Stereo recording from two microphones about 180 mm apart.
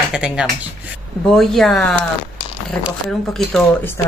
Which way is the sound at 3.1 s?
Centre (ahead or behind).